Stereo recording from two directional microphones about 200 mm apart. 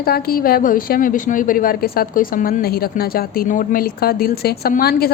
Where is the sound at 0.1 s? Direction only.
50° left (ahead or behind).